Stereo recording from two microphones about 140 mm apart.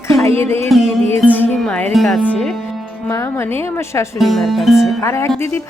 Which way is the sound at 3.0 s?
20° left (ahead or behind).